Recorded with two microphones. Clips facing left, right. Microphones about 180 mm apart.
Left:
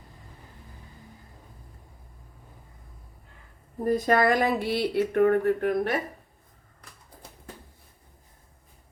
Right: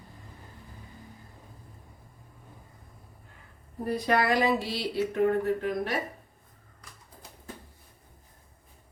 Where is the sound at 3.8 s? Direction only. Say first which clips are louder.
Left 4 dB; 45° left (ahead or behind).